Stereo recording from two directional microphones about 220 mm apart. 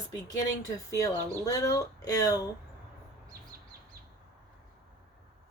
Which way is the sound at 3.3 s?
45° right (ahead or behind).